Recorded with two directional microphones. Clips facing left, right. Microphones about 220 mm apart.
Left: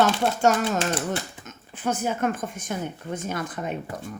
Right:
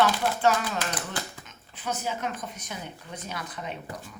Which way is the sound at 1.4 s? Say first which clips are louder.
Left 7 dB; 50° left (ahead or behind).